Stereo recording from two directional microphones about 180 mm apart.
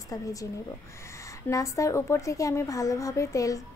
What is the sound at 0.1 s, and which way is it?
Speech, 20° left (ahead or behind).